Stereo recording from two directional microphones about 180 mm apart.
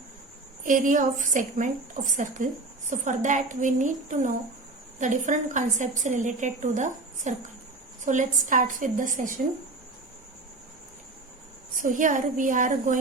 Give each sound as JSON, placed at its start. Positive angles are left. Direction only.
{"t": 0.6, "sound": "a woman's voice", "side_deg": -45}
{"t": 11.7, "sound": "a woman's voice", "side_deg": -45}